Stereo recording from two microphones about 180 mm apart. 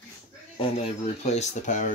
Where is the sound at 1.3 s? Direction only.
40° left (ahead or behind).